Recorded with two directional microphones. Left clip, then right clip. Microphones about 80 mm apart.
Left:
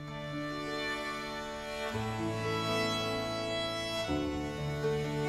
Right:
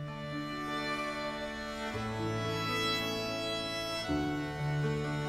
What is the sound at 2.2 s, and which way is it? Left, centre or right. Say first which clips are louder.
Music: left 1 dB; left.